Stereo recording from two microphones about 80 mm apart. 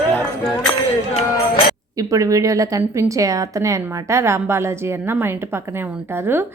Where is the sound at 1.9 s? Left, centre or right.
Right.